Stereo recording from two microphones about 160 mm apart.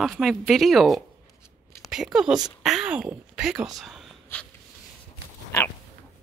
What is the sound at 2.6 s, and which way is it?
Speech, 5° right (ahead or behind).